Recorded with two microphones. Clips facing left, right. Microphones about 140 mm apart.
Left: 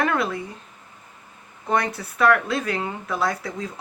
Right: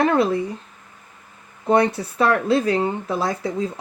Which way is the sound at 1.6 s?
25° right (ahead or behind).